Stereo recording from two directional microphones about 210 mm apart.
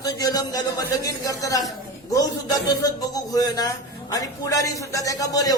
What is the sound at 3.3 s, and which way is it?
A man's voice, 15° left (ahead or behind).